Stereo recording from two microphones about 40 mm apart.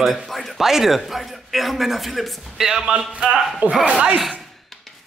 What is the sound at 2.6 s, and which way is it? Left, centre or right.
Speech, centre.